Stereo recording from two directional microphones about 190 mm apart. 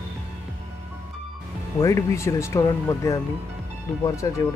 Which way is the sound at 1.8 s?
15° left (ahead or behind).